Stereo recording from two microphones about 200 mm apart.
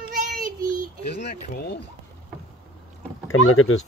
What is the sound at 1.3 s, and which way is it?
Speech, 55° left (ahead or behind).